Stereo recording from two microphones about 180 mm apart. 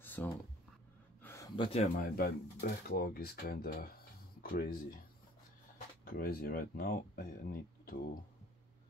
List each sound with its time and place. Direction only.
0.0 s a sound: 10° left (ahead or behind)
1.6 s speech: 35° left (ahead or behind)
2.0 s speech: 55° left (ahead or behind)
6.0 s speech: 55° left (ahead or behind)